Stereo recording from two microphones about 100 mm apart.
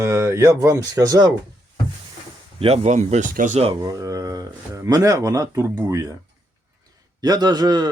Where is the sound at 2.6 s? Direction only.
75° right (ahead or behind).